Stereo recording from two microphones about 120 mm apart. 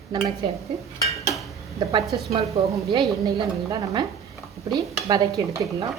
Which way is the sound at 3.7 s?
40° right (ahead or behind).